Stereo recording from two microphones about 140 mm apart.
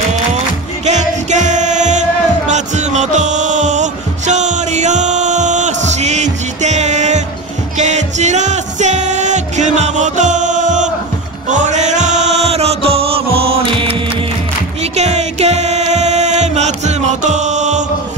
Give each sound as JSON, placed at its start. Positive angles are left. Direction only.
{"t": 0.8, "sound": "music", "side_deg": -60}
{"t": 14.8, "sound": "music", "side_deg": -55}